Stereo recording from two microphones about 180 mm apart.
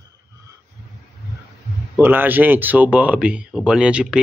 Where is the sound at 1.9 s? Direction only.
10° right (ahead or behind).